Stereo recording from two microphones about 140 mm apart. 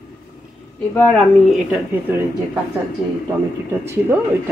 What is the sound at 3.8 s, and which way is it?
Speech, 15° right (ahead or behind).